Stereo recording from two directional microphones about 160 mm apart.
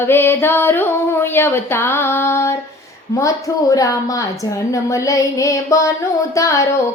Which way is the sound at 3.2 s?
20° left (ahead or behind).